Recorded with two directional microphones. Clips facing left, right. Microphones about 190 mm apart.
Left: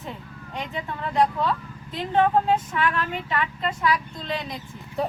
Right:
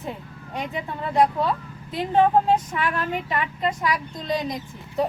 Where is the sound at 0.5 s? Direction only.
10° right (ahead or behind).